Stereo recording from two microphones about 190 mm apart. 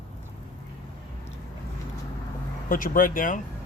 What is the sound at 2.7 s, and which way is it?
Speech, 45° left (ahead or behind).